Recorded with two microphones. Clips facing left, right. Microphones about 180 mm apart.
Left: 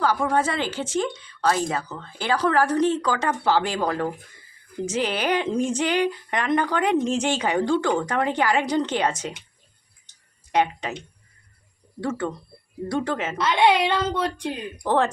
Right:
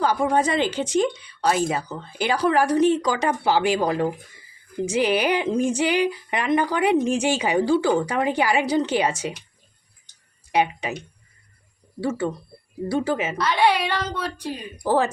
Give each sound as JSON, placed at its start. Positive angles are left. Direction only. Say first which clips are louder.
{"t": 0.0, "sound": "speech", "louder": "right 1 dB", "side_deg": -20}
{"t": 10.5, "sound": "speech", "louder": "even", "side_deg": -10}
{"t": 11.9, "sound": "speech", "louder": "right 2 dB", "side_deg": -5}
{"t": 13.3, "sound": "a child's voice", "louder": "left 3 dB", "side_deg": 20}
{"t": 14.8, "sound": "speech", "louder": "right 1 dB", "side_deg": -5}